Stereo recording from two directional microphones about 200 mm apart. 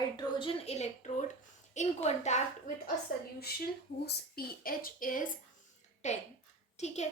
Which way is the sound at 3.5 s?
50° left (ahead or behind).